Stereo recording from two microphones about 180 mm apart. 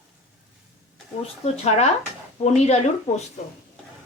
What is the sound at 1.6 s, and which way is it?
Speech, 40° left (ahead or behind).